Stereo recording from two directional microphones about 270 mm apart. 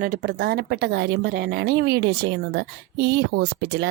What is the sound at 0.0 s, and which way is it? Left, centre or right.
Speech, right.